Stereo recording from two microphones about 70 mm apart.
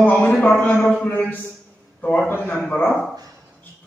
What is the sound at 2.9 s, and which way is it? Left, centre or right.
Speech, centre.